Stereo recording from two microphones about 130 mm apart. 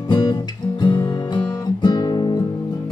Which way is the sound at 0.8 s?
35° left (ahead or behind).